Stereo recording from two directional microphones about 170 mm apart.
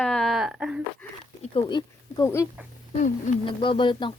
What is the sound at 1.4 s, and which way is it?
Speech, 30° left (ahead or behind).